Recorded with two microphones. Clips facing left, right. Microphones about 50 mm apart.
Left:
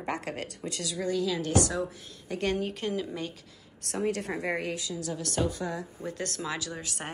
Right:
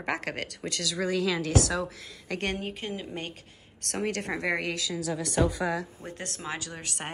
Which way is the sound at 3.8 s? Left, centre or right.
Right.